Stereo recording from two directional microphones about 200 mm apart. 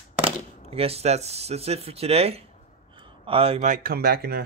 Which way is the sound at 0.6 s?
30° right (ahead or behind).